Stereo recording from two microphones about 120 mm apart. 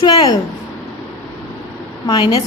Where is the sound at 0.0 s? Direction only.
35° left (ahead or behind).